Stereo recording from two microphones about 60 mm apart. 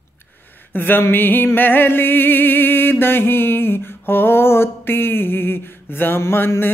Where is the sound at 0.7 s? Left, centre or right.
Left.